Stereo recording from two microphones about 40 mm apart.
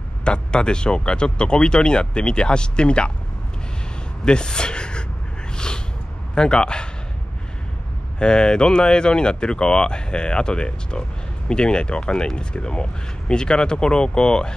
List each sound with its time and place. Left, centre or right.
0.2 s speech: left
4.2 s speech: left
6.3 s speech: left
8.2 s speech: left